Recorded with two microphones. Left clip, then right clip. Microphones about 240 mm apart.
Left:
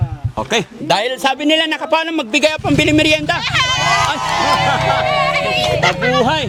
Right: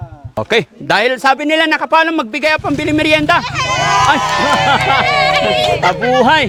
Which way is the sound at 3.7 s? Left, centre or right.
Left.